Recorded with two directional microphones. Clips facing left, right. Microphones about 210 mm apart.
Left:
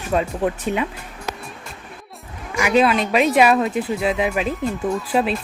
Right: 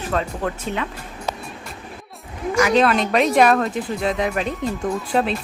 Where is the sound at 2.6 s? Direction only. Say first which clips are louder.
Left 1 dB; 5° left (ahead or behind).